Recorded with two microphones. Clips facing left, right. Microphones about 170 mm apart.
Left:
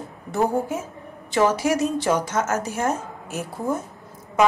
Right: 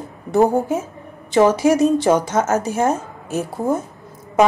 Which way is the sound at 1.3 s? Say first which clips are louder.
Right 6 dB; 20° right (ahead or behind).